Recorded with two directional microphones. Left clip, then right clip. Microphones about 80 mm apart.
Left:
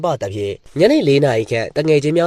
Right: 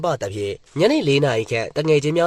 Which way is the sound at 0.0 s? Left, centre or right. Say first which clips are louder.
Left 3 dB; centre.